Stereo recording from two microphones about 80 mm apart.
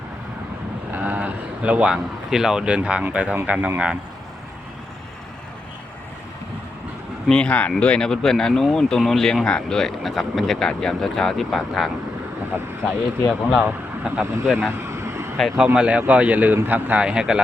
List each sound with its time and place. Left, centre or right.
0.9 s a sound: centre
2.3 s speech: centre
7.3 s speech: centre
13.6 s speech: centre
14.4 s speech: centre
14.8 s vehicle: right
15.4 s speech: centre
15.6 s speech: centre